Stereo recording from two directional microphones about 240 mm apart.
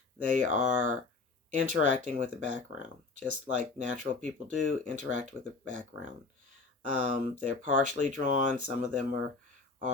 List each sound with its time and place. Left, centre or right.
0.2 s speech: right
6.8 s speech: right